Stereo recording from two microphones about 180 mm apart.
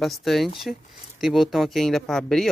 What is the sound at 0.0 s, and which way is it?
Speech, centre (ahead or behind).